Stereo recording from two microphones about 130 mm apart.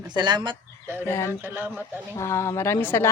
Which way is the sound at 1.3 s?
15° right (ahead or behind).